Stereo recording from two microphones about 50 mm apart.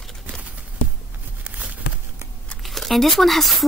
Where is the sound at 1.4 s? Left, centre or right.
Right.